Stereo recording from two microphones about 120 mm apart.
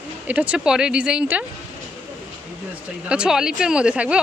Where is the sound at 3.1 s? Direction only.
5° right (ahead or behind).